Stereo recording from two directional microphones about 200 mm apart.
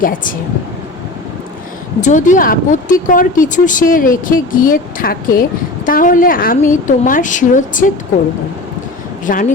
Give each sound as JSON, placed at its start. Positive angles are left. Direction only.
{"t": 0.0, "sound": "speech", "side_deg": 45}
{"t": 2.0, "sound": "a woman's voice", "side_deg": 40}
{"t": 9.2, "sound": "speech", "side_deg": 40}